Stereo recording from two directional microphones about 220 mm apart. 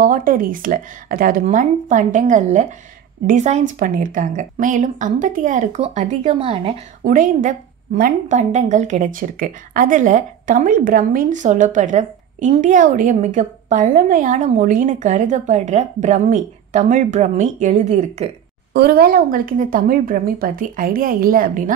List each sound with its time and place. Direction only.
0.0 s a woman's voice: 40° right (ahead or behind)
7.1 s a woman's voice: 35° right (ahead or behind)
18.7 s a woman's voice: 45° right (ahead or behind)